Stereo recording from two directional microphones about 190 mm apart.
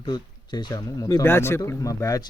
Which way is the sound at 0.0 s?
20° left (ahead or behind).